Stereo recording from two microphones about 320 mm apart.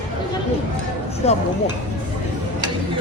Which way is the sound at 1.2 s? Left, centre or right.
Centre.